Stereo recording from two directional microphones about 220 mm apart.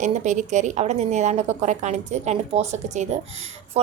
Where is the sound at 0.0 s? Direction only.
35° right (ahead or behind).